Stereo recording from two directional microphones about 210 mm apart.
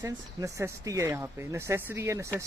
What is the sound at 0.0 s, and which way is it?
A man's voice, 15° right (ahead or behind).